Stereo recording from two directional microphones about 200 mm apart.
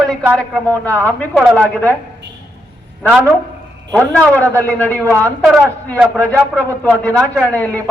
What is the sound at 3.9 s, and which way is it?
A woman's voice, 5° left (ahead or behind).